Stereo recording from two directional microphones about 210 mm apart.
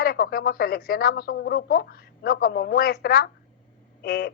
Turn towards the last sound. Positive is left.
turn(degrees=50)  # may be behind; listen again after turning